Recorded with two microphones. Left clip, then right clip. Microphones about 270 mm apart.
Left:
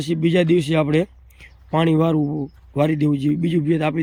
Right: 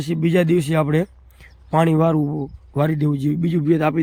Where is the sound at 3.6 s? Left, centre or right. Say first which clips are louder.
Right 6 dB; centre.